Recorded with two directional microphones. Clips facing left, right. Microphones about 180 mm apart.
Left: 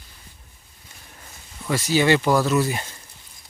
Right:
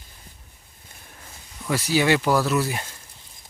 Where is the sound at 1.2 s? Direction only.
Centre (ahead or behind).